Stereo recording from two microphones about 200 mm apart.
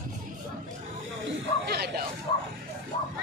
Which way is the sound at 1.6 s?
55° right (ahead or behind).